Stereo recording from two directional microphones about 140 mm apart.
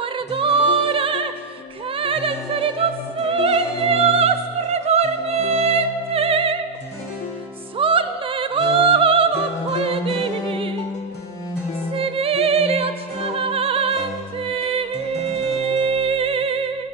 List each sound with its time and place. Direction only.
0.0 s music: 40° right (ahead or behind)
2.8 s opera: 40° right (ahead or behind)
3.3 s music: 45° right (ahead or behind)
7.7 s music: 40° right (ahead or behind)
12.0 s music: 45° right (ahead or behind)
13.4 s opera: 45° right (ahead or behind)
14.4 s music: 40° right (ahead or behind)